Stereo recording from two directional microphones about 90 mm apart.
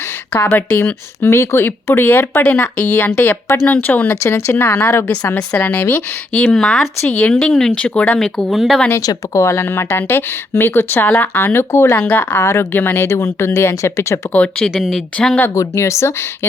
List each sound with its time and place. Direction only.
0.3 s speech: 20° left (ahead or behind)
3.2 s speech: 25° left (ahead or behind)
6.5 s speech: 5° left (ahead or behind)
8.9 s speech: 35° left (ahead or behind)
14.3 s speech: 15° left (ahead or behind)
14.7 s speech: 5° left (ahead or behind)
15.5 s speech: 30° left (ahead or behind)